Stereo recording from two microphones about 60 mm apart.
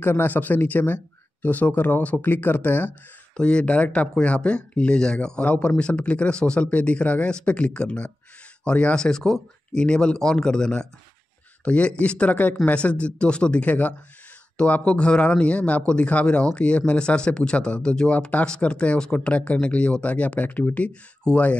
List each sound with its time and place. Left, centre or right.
0.0 s speech: left
3.3 s speech: centre